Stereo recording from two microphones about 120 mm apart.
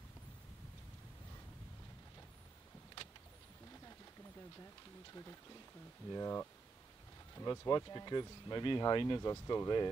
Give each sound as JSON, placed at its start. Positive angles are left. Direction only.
{"t": 5.1, "sound": "speech", "side_deg": 25}